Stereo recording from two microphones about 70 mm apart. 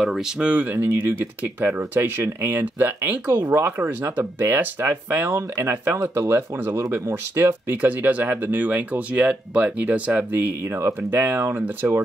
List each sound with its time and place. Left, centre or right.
0.0 s speech: centre
0.4 s speech: right
0.8 s speech: right
10.4 s speech: right
11.0 s speech: right